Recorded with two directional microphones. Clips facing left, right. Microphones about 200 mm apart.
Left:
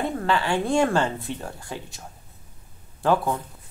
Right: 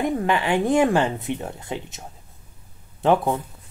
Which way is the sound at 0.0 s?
15° right (ahead or behind).